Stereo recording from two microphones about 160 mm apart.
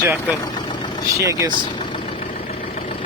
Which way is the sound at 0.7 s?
30° left (ahead or behind).